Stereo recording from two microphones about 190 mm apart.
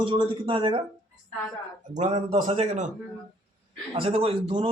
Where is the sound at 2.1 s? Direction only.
30° right (ahead or behind).